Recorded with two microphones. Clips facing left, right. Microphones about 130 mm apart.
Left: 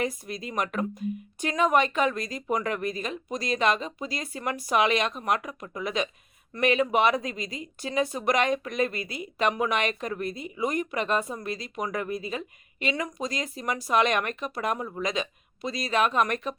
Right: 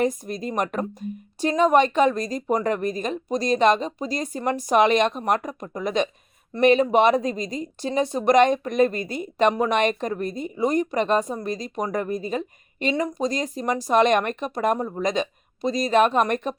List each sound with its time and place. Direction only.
0.0 s speech: 45° right (ahead or behind)